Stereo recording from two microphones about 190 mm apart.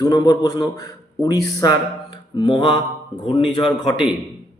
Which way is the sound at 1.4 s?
20° left (ahead or behind).